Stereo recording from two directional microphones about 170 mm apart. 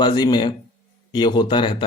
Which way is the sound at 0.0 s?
25° left (ahead or behind).